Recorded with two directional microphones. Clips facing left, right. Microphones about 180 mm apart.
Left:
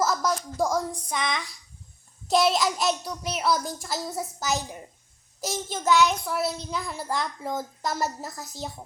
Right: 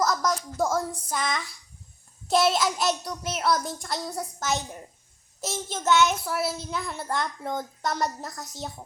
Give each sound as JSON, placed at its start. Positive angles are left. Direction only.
{"t": 0.0, "sound": "a child's voice", "side_deg": 0}